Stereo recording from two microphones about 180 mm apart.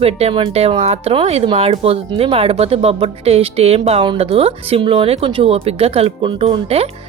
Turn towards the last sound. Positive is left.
turn(degrees=-35)  # may be behind; listen again after turning